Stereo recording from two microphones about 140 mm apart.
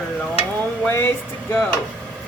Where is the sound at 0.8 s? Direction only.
15° left (ahead or behind).